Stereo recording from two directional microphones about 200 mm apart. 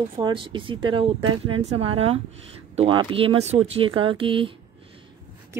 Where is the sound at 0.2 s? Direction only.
25° right (ahead or behind).